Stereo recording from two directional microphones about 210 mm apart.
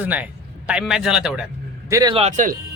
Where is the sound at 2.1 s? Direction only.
35° right (ahead or behind).